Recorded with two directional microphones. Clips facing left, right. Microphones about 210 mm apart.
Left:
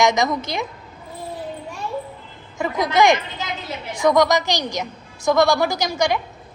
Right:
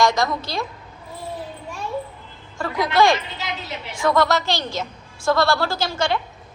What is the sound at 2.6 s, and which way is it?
A woman's voice, 20° left (ahead or behind).